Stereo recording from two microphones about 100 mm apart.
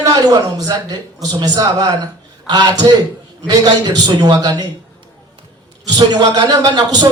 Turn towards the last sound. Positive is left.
turn(degrees=-45)  # may be behind; listen again after turning